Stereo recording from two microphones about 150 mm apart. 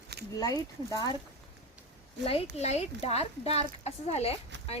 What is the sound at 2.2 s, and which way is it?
A woman's voice, 40° left (ahead or behind).